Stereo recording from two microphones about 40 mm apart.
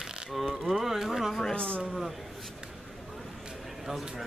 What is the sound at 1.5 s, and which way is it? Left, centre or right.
Speech, left.